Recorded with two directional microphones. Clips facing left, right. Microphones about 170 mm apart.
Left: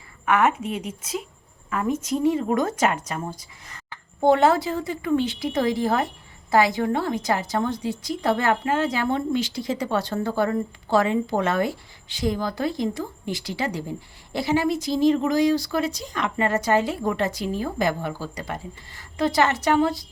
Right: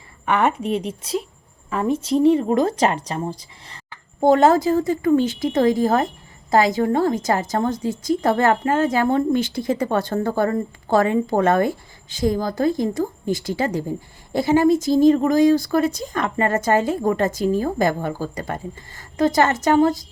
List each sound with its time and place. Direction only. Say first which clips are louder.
0.3 s speech: right 2 dB; 30° right (ahead or behind)
4.2 s a woman's voice: right 3 dB; 40° right (ahead or behind)